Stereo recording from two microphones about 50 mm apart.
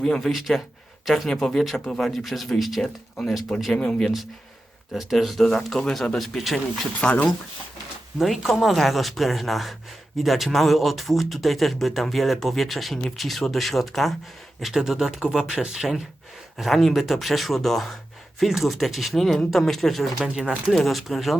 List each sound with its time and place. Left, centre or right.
0.0 s speech: centre
0.3 s speech: centre
3.8 s speech: centre
5.1 s speech: centre
7.0 s speech: left
8.5 s speech: centre
16.6 s speech: centre